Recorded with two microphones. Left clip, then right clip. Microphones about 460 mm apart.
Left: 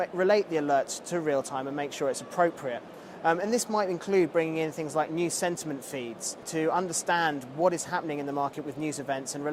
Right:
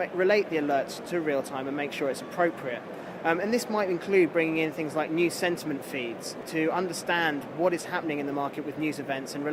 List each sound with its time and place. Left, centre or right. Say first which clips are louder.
0.0 s speech: even; left